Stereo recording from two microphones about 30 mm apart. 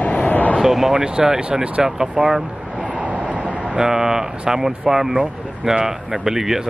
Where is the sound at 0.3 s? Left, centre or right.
Left.